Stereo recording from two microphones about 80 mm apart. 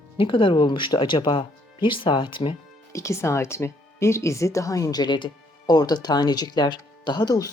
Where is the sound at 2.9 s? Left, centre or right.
Left.